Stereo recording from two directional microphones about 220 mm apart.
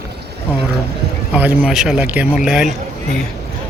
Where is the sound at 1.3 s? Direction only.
5° right (ahead or behind).